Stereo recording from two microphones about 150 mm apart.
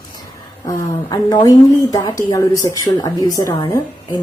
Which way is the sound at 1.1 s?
25° left (ahead or behind).